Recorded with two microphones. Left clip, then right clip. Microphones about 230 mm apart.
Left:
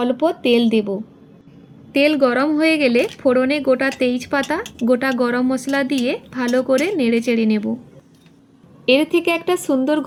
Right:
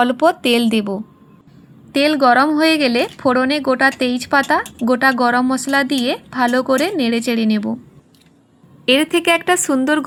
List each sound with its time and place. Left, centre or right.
0.0 s a woman's voice: right
1.9 s speech: centre
8.9 s a woman's voice: right